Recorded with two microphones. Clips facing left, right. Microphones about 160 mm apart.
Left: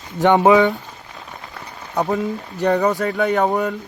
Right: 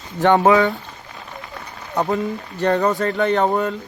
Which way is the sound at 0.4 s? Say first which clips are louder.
Left 3 dB; 15° left (ahead or behind).